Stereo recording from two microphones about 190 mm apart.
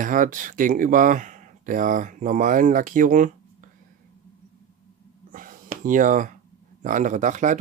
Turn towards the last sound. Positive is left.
turn(degrees=-40)  # may be behind; listen again after turning